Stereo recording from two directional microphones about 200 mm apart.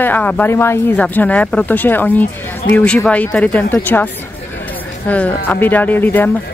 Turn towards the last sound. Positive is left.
turn(degrees=10)  # may be behind; listen again after turning